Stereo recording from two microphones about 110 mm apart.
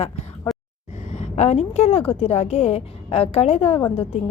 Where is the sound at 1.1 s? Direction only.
90° left.